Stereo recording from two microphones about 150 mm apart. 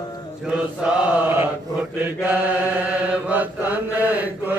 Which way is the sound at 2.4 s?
10° right (ahead or behind).